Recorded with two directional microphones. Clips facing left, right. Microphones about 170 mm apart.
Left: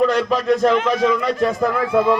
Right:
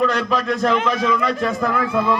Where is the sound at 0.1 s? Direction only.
30° left (ahead or behind).